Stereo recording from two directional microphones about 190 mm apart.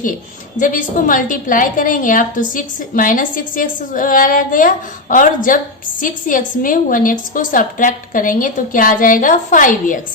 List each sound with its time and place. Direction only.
0.6 s a woman's voice: 45° left (ahead or behind)